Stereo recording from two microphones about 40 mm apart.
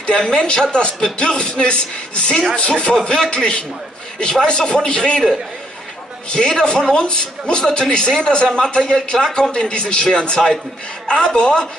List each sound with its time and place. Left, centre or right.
0.2 s a man's voice: centre
0.7 s speech: left
6.5 s speech: centre